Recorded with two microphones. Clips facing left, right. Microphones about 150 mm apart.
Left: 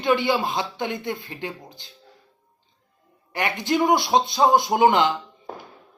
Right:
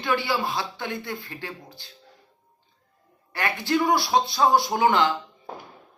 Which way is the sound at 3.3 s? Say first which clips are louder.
Left 2 dB; 20° left (ahead or behind).